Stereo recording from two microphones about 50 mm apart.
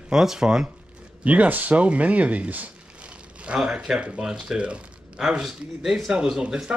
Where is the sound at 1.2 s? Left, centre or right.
Right.